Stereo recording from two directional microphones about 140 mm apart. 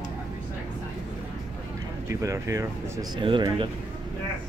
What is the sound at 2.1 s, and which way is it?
Speech, 20° right (ahead or behind).